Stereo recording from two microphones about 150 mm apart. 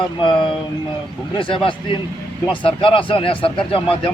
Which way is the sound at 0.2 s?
35° left (ahead or behind).